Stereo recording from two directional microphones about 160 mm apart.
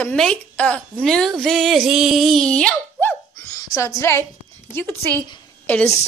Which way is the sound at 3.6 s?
25° left (ahead or behind).